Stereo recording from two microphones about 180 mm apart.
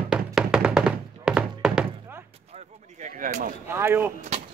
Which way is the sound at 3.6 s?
15° right (ahead or behind).